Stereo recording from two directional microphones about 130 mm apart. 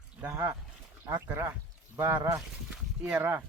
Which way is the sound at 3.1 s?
20° right (ahead or behind).